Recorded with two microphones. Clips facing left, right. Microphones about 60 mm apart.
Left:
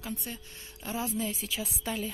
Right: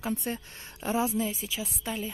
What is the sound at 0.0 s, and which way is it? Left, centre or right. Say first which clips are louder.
Speech: right 7 dB; right.